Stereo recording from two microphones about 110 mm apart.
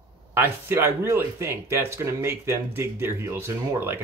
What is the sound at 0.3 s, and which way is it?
Speech, 20° right (ahead or behind).